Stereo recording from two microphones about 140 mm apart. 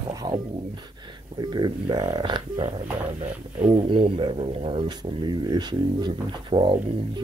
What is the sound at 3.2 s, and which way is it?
Music, 60° right (ahead or behind).